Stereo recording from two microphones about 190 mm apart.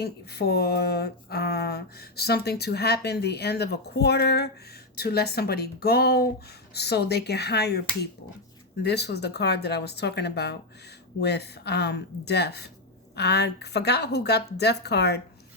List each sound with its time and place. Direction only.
0.0 s speech: 60° left (ahead or behind)